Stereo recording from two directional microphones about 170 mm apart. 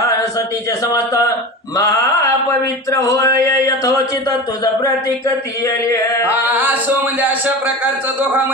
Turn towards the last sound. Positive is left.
turn(degrees=-10)  # may be behind; listen again after turning